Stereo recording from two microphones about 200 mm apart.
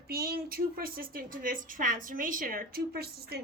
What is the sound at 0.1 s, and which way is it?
A woman's voice, 50° right (ahead or behind).